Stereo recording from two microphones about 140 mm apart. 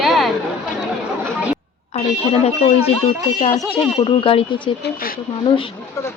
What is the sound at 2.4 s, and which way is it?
Speech, 45° left (ahead or behind).